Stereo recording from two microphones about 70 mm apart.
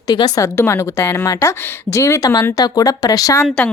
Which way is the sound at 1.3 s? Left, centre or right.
Left.